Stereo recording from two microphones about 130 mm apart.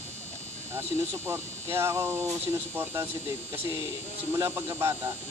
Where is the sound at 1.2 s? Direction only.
20° right (ahead or behind).